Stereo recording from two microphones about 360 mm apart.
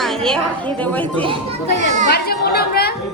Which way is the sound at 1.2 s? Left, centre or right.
Centre.